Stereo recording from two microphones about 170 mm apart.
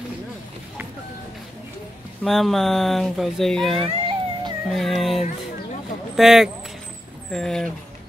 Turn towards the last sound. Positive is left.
turn(degrees=5)  # may be behind; listen again after turning